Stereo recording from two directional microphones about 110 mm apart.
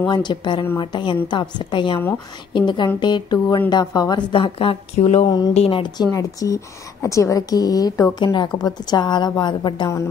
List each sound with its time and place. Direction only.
0.0 s a woman's voice: 40° left (ahead or behind)
5.0 s a sound: 70° left (ahead or behind)
6.1 s speech: 30° left (ahead or behind)